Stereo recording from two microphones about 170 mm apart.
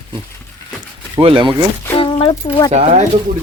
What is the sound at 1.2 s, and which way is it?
Speech, 30° right (ahead or behind).